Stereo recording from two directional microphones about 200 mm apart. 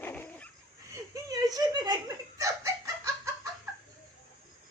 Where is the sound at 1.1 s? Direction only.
20° right (ahead or behind).